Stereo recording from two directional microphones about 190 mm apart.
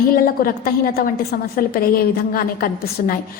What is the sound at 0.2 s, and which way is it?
A woman's voice, 50° left (ahead or behind).